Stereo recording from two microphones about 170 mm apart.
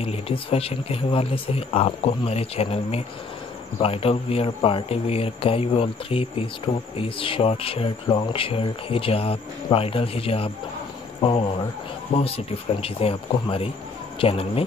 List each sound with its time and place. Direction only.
0.0 s speech: 35° left (ahead or behind)